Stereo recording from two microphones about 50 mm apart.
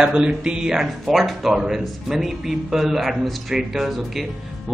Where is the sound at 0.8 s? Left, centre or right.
Centre.